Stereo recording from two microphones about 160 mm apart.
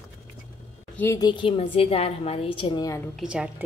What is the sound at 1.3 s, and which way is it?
A woman's voice, 30° left (ahead or behind).